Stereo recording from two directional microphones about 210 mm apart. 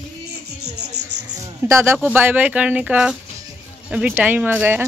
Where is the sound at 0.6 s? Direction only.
50° right (ahead or behind).